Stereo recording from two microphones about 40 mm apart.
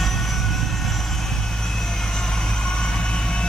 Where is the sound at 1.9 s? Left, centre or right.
Centre.